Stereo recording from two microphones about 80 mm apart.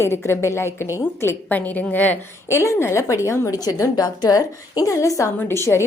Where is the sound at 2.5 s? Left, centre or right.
Left.